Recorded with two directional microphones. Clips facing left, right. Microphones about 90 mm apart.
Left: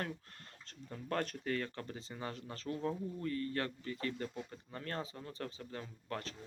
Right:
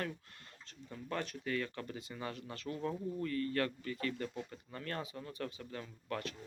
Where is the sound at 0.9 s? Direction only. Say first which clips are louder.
Left 2 dB; 45° left (ahead or behind).